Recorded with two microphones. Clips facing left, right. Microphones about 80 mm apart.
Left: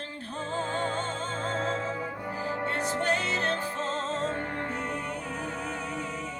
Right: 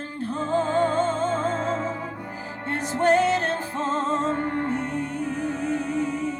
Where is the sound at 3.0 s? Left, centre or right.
Right.